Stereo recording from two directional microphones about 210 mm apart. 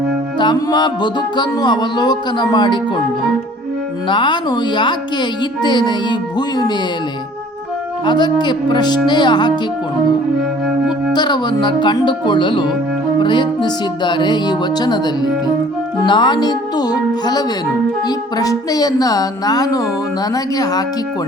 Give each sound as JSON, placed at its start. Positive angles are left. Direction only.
{"t": 0.3, "sound": "speech", "side_deg": 20}
{"t": 4.1, "sound": "speech", "side_deg": 20}
{"t": 8.0, "sound": "speech", "side_deg": 20}
{"t": 11.1, "sound": "speech", "side_deg": 20}
{"t": 18.3, "sound": "music", "side_deg": 15}